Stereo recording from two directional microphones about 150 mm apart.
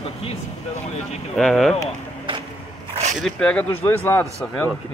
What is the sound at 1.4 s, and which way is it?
Speech, centre (ahead or behind).